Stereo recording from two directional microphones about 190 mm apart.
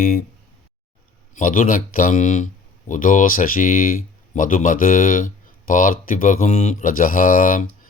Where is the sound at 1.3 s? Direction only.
45° left (ahead or behind).